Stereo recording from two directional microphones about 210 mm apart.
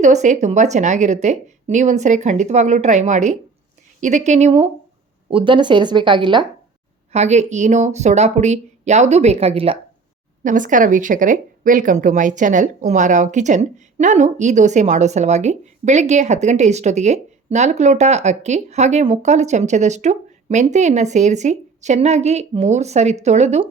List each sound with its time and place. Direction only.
0.0 s a woman's voice: 35° right (ahead or behind)